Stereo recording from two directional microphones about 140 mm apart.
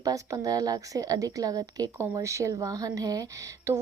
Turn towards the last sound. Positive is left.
turn(degrees=-25)  # may be behind; listen again after turning